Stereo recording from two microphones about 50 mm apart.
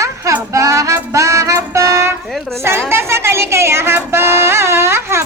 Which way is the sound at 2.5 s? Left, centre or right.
Right.